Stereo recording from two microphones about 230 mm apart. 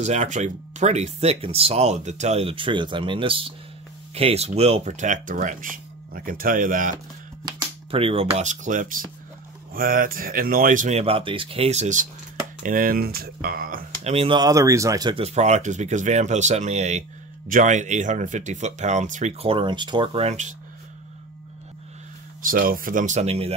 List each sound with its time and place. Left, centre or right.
0.0 s speech: right
7.4 s speech: right
22.4 s speech: right